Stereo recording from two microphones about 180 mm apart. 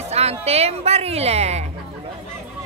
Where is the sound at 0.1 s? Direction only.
35° right (ahead or behind).